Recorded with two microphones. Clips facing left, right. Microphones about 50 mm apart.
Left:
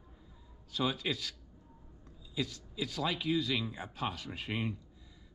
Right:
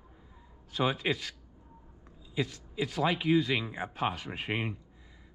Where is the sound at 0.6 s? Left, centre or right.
Right.